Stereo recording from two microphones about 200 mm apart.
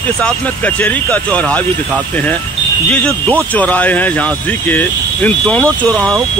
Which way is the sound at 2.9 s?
5° left (ahead or behind).